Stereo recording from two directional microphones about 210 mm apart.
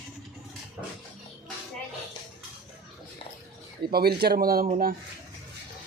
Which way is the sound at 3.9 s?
45° right (ahead or behind).